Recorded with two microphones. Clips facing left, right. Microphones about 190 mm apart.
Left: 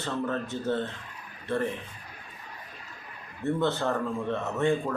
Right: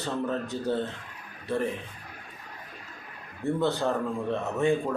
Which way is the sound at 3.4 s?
15° right (ahead or behind).